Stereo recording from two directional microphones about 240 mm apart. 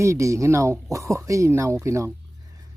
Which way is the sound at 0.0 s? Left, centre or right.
Centre.